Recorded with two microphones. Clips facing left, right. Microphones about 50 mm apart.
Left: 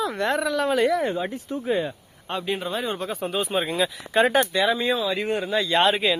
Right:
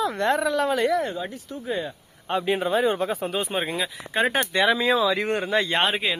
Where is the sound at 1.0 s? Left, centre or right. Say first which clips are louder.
Left 4 dB; left.